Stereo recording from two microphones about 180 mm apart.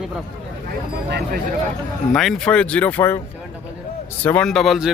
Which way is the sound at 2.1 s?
Centre (ahead or behind).